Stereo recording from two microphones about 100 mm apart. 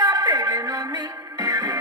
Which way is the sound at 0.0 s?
50° right (ahead or behind).